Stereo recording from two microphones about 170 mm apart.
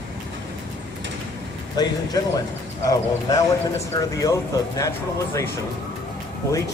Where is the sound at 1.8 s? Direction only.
25° left (ahead or behind).